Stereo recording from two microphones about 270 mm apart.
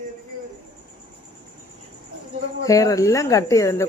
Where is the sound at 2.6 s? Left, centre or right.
Centre.